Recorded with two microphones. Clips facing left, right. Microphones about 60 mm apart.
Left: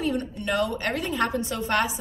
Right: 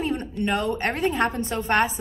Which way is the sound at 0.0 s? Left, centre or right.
Right.